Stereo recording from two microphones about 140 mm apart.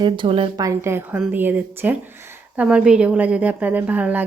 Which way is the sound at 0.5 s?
25° right (ahead or behind).